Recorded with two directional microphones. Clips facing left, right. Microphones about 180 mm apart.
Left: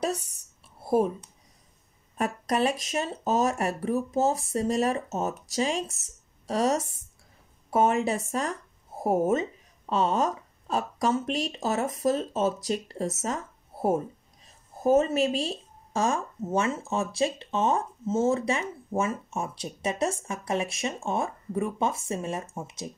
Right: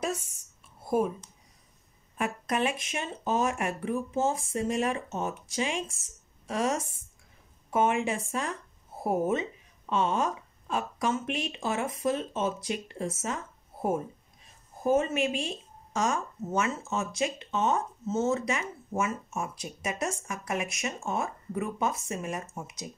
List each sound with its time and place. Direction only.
0.8 s a woman's voice: 35° left (ahead or behind)